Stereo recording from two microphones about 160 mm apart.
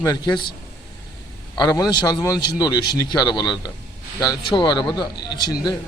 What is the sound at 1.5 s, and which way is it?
Speech, 25° left (ahead or behind).